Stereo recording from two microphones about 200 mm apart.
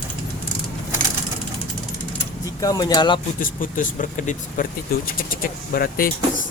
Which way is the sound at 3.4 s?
45° left (ahead or behind).